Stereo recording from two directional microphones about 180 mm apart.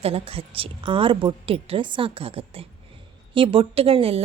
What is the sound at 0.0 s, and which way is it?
A woman's voice, 30° right (ahead or behind).